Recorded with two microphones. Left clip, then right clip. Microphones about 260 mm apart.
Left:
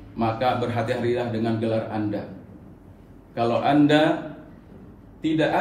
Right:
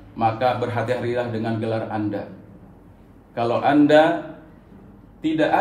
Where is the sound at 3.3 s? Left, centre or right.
Right.